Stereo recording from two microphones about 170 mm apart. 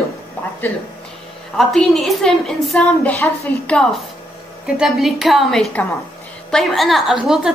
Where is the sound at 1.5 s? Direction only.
Centre (ahead or behind).